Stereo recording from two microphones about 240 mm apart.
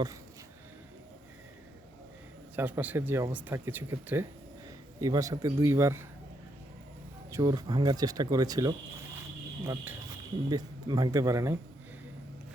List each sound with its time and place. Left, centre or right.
2.6 s speech: centre
7.3 s speech: centre